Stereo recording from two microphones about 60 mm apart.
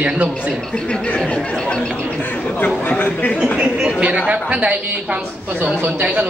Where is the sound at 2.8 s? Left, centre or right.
Left.